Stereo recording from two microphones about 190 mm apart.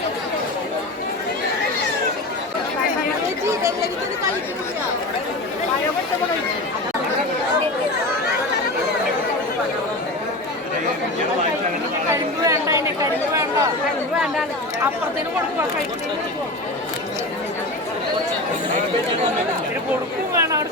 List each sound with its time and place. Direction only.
12.5 s chatter: 15° right (ahead or behind)